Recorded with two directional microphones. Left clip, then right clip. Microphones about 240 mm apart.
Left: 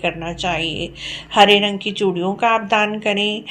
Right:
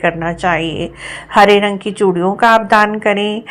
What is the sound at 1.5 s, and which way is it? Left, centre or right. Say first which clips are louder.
Speech: right 4 dB; right.